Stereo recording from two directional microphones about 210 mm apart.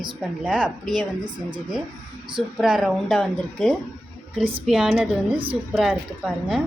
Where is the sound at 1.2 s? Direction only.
20° right (ahead or behind).